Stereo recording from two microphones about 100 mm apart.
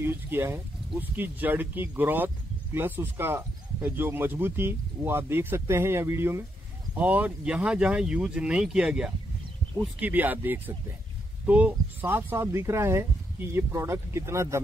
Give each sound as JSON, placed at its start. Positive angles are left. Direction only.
{"t": 0.0, "sound": "speech", "side_deg": -25}